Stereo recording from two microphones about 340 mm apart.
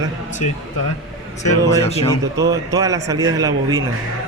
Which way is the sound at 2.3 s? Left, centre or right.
Centre.